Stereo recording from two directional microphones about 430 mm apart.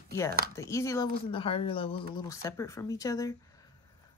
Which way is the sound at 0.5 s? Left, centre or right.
Centre.